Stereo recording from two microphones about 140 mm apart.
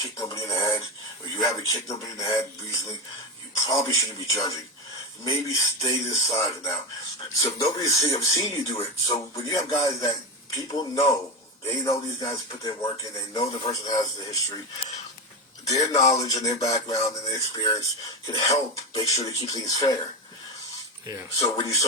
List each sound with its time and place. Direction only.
0.0 s speech: 25° left (ahead or behind)
15.6 s speech: 25° left (ahead or behind)
21.3 s speech: 25° left (ahead or behind)